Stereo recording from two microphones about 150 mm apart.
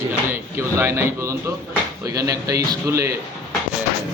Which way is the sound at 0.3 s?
15° right (ahead or behind).